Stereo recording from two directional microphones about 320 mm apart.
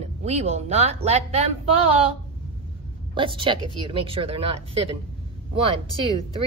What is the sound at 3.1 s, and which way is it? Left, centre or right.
Speech, centre.